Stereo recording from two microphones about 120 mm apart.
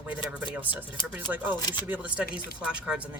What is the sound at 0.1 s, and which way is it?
Speech, 10° right (ahead or behind).